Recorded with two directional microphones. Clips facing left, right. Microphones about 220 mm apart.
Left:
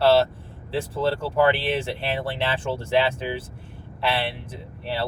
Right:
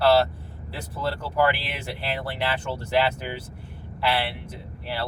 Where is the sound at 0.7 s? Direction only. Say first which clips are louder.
Left 6 dB; 25° left (ahead or behind).